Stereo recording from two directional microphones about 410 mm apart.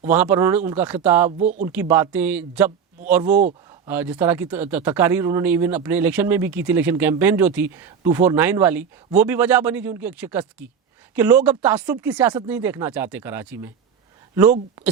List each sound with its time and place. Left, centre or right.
0.0 s speech: centre
1.4 s speech: centre
1.6 s speech: centre
3.3 s speech: centre
3.8 s speech: centre